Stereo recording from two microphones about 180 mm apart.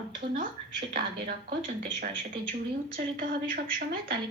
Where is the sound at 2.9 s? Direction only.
55° right (ahead or behind).